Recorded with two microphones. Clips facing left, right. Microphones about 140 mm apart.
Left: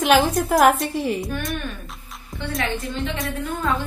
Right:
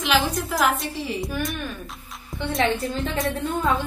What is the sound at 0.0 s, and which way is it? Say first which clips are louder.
A woman's voice: left 5 dB; 50° left (ahead or behind).